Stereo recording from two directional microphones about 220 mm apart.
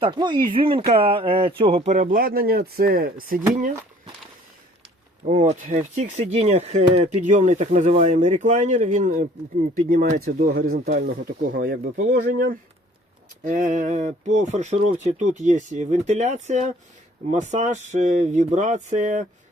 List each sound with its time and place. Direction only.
0.0 s speech: 20° right (ahead or behind); by 3.7 s 40° right (ahead or behind)
5.3 s speech: 35° right (ahead or behind)